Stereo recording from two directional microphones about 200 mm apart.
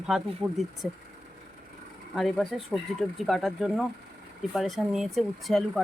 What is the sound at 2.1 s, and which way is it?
Speech, centre (ahead or behind).